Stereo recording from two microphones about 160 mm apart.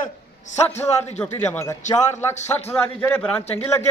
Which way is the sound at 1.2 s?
15° left (ahead or behind).